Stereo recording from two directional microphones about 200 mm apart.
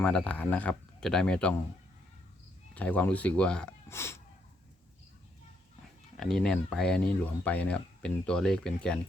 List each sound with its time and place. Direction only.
0.0 s speech: 5° left (ahead or behind)
2.7 s speech: 5° left (ahead or behind)
6.1 s speech: 5° left (ahead or behind)